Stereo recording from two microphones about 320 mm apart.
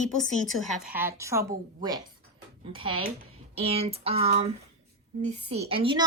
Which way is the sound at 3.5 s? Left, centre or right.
Centre.